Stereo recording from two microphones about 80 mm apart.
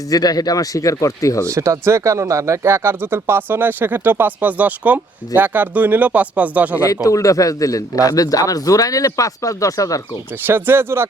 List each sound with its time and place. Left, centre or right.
0.1 s a man's voice: left
1.5 s speech: right; by 6.7 s centre
6.8 s a man's voice: left
10.4 s speech: right